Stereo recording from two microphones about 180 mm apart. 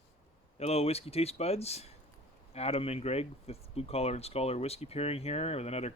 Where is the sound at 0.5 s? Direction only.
35° left (ahead or behind).